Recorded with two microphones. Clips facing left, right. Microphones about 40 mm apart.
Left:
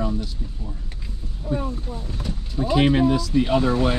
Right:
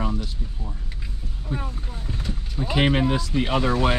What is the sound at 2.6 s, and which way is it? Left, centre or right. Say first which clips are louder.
Speech: left 3 dB; right.